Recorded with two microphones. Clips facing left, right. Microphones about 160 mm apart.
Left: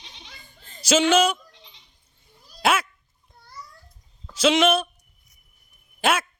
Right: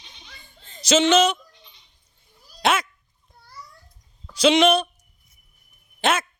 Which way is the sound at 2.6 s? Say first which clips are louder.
Even; 5° left (ahead or behind).